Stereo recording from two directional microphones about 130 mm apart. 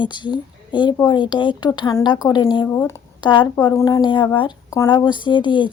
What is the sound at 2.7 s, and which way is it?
Speech, 20° left (ahead or behind).